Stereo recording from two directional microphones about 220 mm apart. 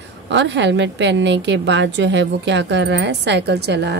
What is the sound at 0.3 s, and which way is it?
A woman's voice, 55° right (ahead or behind).